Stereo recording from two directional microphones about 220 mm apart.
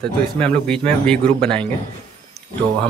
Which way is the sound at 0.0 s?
5° left (ahead or behind).